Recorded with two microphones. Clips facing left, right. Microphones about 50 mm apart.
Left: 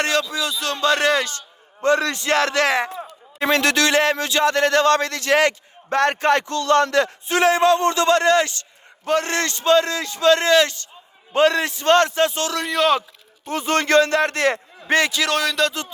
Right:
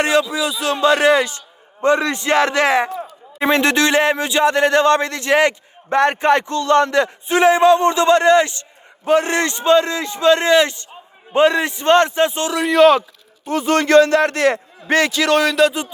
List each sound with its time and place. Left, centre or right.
0.0 s a man's voice: centre
12.6 s a man's voice: centre
13.4 s speech: right
15.1 s a man's voice: centre